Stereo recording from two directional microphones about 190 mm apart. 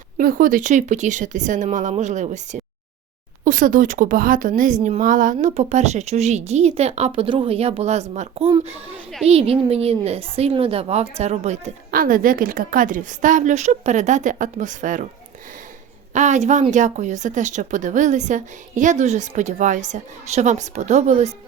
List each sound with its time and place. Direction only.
0.2 s a woman's voice: 45° right (ahead or behind)
11.9 s a woman's voice: 50° right (ahead or behind)
16.1 s a woman's voice: 40° right (ahead or behind)